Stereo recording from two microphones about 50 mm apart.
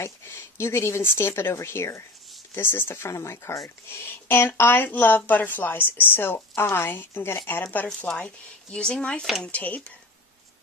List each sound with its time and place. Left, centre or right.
0.0 s speech: left
2.5 s speech: left
3.6 s speech: left
8.7 s speech: centre
9.5 s speech: left